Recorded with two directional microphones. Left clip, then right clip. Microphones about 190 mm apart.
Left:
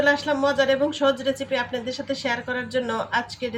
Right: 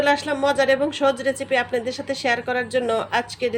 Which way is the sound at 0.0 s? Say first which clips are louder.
Right 1 dB; 45° right (ahead or behind).